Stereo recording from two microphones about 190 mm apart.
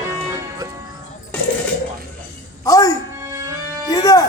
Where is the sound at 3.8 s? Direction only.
20° left (ahead or behind).